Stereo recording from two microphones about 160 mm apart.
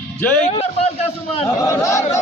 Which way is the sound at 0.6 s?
40° left (ahead or behind).